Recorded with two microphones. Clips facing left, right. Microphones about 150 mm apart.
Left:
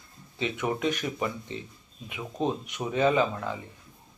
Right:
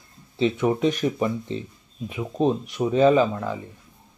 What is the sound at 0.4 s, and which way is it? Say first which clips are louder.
Speech: right 8 dB; 30° right (ahead or behind).